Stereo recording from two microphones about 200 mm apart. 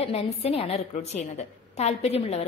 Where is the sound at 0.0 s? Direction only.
30° left (ahead or behind).